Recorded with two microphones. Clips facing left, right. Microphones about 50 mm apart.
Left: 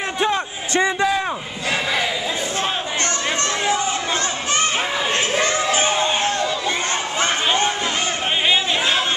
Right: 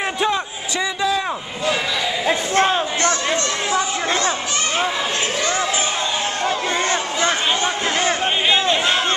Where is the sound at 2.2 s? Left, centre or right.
Right.